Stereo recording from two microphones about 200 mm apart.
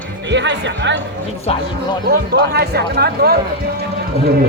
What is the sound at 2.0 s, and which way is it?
Speech, 55° right (ahead or behind).